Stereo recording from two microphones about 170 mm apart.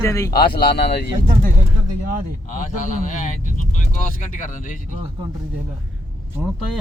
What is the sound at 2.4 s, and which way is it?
Speech, 50° left (ahead or behind).